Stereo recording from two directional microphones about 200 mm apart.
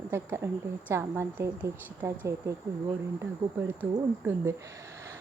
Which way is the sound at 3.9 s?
15° right (ahead or behind).